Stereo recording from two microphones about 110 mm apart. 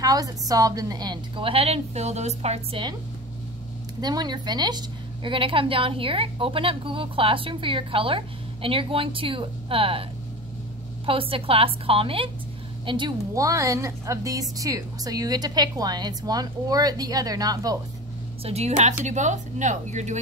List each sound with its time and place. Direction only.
0.0 s a woman's voice: 35° right (ahead or behind); by 2.8 s 75° right (ahead or behind)
4.0 s a woman's voice: 40° right (ahead or behind); by 10.0 s 55° right (ahead or behind)
11.1 s a woman's voice: 55° right (ahead or behind)
13.3 s a woman's voice: 30° right (ahead or behind)
18.4 s speech: 75° right (ahead or behind)